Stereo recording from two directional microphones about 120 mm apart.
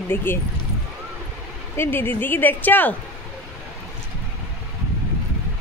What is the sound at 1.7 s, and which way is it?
Speech, 20° left (ahead or behind).